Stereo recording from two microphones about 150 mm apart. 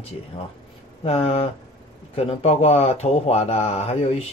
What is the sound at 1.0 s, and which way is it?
Speech, 40° left (ahead or behind).